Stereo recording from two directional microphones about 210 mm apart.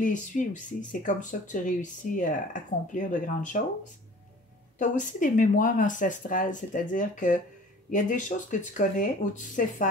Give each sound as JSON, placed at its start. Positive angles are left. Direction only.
{"t": 0.0, "sound": "speech", "side_deg": 35}
{"t": 4.7, "sound": "speech", "side_deg": 35}